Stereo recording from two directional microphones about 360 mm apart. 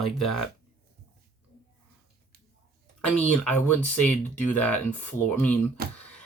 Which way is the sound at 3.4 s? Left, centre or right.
Centre.